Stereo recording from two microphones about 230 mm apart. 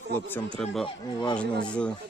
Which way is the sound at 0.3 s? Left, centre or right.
Centre.